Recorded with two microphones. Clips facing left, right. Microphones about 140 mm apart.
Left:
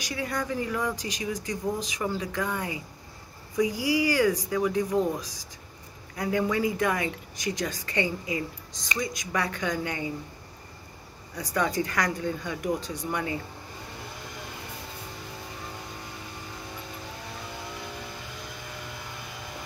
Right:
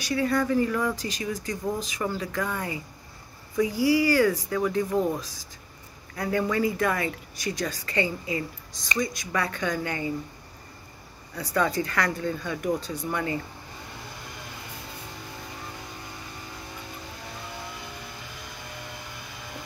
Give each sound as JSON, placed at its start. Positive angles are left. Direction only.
{"t": 0.0, "sound": "speech", "side_deg": 15}
{"t": 6.1, "sound": "speech", "side_deg": 15}
{"t": 11.3, "sound": "speech", "side_deg": 15}